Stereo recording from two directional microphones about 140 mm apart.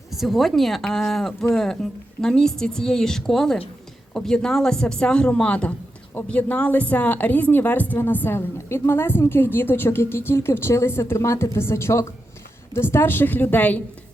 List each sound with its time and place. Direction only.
0.1 s speech: centre (ahead or behind)